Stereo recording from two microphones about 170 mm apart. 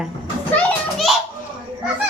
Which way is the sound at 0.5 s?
Centre (ahead or behind).